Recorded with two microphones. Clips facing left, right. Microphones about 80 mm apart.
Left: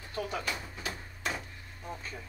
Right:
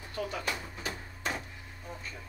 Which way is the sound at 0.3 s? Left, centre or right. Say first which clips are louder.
Even; centre.